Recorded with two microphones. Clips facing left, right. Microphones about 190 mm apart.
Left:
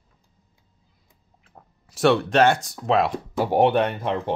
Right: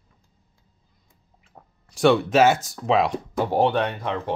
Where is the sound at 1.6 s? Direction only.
Centre (ahead or behind).